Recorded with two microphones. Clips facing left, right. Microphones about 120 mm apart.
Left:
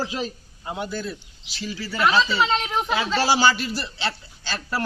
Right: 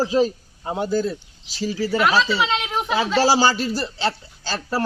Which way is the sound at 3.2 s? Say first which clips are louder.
Right 2 dB; 35° right (ahead or behind).